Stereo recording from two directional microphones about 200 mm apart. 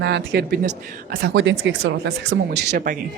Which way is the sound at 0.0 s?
60° right (ahead or behind).